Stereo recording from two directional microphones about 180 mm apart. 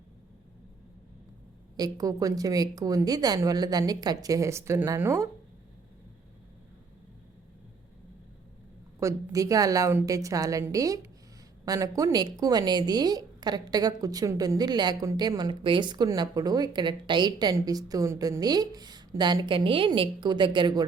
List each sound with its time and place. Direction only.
1.7 s a woman's voice: 20° right (ahead or behind)
9.0 s a woman's voice: 20° right (ahead or behind)